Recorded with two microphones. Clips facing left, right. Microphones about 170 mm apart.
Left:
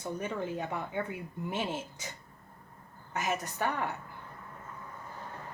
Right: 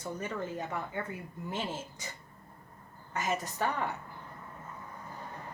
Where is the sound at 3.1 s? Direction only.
15° left (ahead or behind).